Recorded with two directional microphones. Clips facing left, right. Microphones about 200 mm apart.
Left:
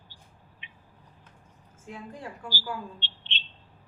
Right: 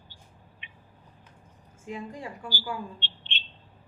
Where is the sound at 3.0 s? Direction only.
55° right (ahead or behind).